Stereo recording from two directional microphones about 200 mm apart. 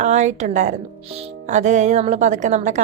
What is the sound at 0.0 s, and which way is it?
Speech, 35° right (ahead or behind).